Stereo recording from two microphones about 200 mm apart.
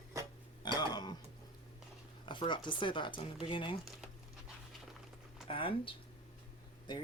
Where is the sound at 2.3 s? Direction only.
25° left (ahead or behind).